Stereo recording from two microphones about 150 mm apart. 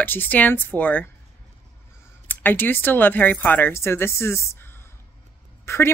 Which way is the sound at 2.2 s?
10° left (ahead or behind).